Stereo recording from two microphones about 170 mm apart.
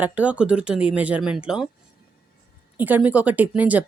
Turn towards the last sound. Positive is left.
turn(degrees=-10)  # may be behind; listen again after turning